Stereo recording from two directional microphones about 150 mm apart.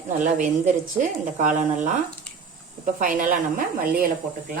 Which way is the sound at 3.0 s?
60° right (ahead or behind).